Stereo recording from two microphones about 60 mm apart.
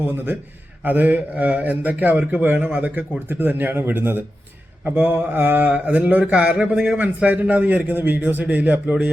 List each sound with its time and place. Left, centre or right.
0.9 s speech: right